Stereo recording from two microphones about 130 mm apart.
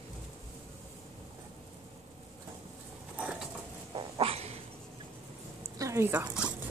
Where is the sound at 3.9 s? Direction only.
50° right (ahead or behind).